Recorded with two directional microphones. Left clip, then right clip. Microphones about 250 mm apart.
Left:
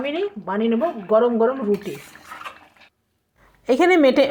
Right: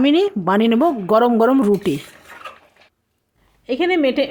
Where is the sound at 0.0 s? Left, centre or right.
Right.